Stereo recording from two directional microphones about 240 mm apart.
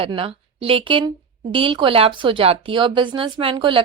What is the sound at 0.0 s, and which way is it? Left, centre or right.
Speech, right.